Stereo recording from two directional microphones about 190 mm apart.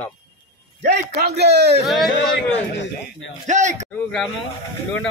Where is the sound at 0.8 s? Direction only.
60° right (ahead or behind).